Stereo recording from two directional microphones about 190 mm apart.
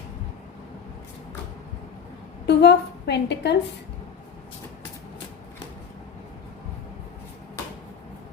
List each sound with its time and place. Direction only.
2.5 s a woman's voice: 65° left (ahead or behind)